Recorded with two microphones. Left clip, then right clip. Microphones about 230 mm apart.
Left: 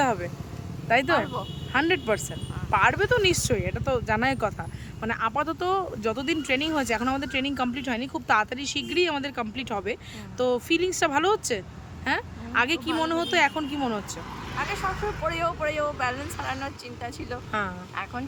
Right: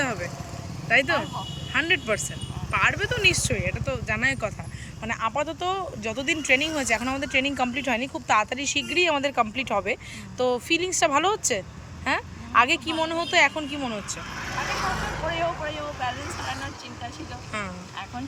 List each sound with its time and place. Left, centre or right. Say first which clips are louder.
0.0 s vehicle: left 3 dB; centre
0.9 s speech: right 1 dB; centre
15.3 s speech: left 1 dB; centre